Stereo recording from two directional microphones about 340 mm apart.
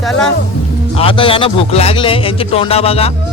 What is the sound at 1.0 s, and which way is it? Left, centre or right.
Speech, centre.